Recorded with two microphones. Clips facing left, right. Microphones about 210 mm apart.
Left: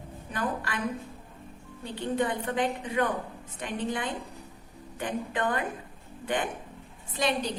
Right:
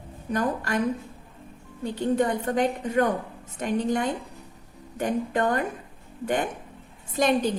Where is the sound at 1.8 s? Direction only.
45° right (ahead or behind).